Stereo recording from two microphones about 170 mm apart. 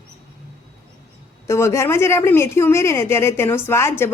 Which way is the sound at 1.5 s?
15° left (ahead or behind).